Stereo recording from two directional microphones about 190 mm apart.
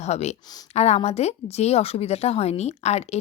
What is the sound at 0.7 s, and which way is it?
A woman's voice, 35° left (ahead or behind).